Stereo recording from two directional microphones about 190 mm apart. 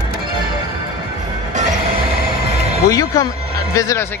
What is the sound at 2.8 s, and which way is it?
Speech, 20° left (ahead or behind).